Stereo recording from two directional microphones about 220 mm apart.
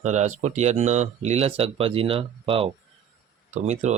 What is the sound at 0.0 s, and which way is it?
Speech, 30° right (ahead or behind).